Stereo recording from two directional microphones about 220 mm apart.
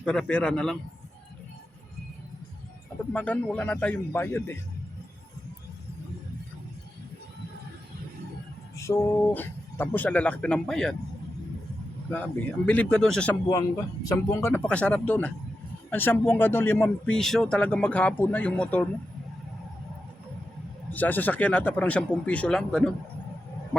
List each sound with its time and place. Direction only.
0.0 s a man's voice: 5° left (ahead or behind)
3.1 s speech: 5° left (ahead or behind)
8.7 s speech: 15° left (ahead or behind)
12.6 s a man's voice: 5° left (ahead or behind)
13.5 s speech: 15° left (ahead or behind)
20.9 s speech: 10° left (ahead or behind)